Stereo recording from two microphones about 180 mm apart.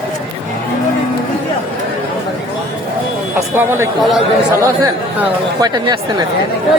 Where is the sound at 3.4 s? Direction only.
15° right (ahead or behind).